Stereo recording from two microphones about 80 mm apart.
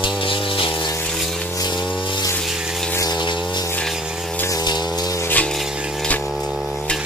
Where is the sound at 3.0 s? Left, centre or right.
Left.